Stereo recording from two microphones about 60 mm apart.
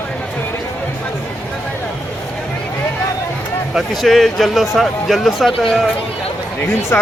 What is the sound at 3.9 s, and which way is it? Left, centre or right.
Speech, centre.